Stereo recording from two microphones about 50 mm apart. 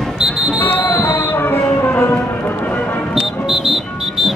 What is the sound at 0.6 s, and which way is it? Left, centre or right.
Music, left.